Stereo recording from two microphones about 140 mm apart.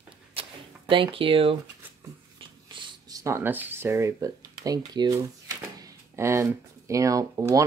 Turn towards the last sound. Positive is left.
turn(degrees=-25)  # may be behind; listen again after turning